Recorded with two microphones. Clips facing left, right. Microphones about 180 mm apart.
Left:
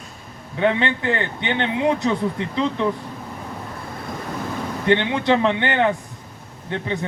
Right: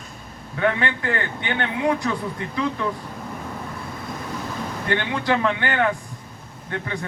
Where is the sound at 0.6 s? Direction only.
20° left (ahead or behind).